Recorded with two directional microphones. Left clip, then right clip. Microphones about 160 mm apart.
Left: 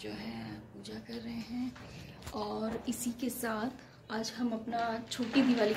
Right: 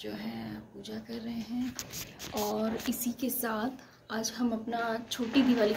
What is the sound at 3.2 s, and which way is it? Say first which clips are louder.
A woman's voice: right 1 dB; centre (ahead or behind).